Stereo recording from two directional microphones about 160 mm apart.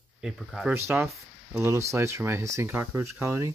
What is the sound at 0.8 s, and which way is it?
Speech, 15° right (ahead or behind).